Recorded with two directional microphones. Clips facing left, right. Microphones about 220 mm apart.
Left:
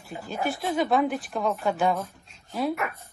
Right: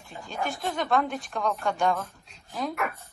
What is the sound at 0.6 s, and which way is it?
A woman's voice, 5° left (ahead or behind).